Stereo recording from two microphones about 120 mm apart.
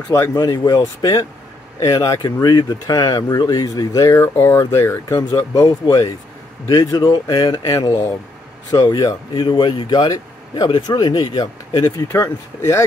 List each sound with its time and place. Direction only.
0.1 s speech: 20° left (ahead or behind)
0.4 s a man's voice: 30° left (ahead or behind)
12.1 s speech: 20° left (ahead or behind)